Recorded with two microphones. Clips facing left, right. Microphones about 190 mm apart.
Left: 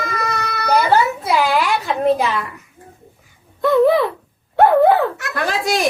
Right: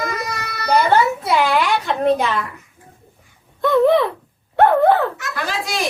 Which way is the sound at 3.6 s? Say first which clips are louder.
Left 1 dB; centre (ahead or behind).